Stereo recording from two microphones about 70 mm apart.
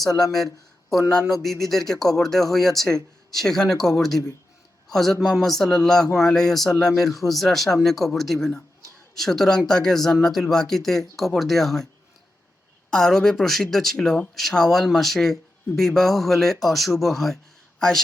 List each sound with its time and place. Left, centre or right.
0.2 s a man's voice: centre
12.9 s speech: centre